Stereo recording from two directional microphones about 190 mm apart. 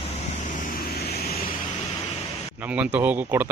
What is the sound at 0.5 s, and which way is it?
Vehicle, 55° left (ahead or behind).